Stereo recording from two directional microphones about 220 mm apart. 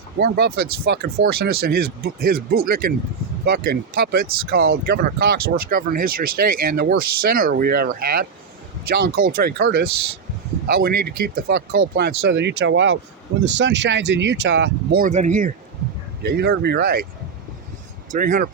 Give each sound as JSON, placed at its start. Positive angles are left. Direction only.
{"t": 0.2, "sound": "speech", "side_deg": -45}
{"t": 16.2, "sound": "speech", "side_deg": -45}
{"t": 18.1, "sound": "speech", "side_deg": -40}